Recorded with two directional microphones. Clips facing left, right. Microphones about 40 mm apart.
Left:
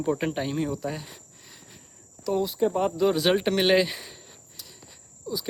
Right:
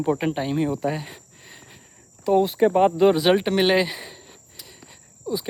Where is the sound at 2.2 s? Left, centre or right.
Right.